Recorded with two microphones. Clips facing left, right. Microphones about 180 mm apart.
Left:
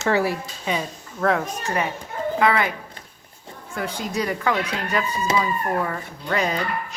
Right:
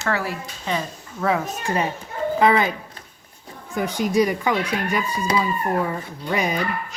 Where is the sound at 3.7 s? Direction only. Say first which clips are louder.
Right 6 dB; 15° right (ahead or behind).